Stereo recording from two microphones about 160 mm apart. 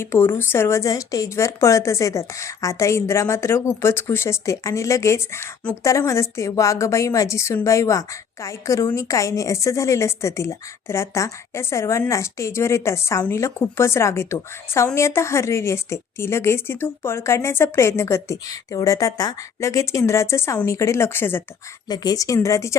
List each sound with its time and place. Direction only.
0.0 s a woman's voice: 15° left (ahead or behind)
21.8 s speech: 25° left (ahead or behind)